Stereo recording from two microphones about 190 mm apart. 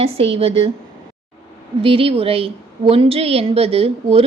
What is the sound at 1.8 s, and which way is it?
A woman's voice, 30° right (ahead or behind).